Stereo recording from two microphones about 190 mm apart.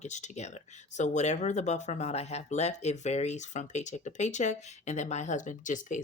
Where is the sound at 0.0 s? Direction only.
40° left (ahead or behind).